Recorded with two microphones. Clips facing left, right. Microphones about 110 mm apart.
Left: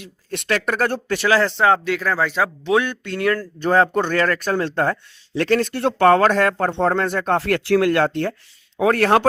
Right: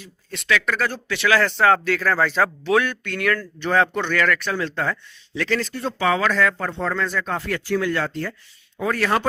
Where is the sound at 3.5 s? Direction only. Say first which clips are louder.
Left 5 dB; 40° left (ahead or behind).